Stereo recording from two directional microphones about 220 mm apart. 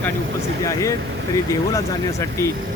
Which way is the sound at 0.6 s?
15° left (ahead or behind).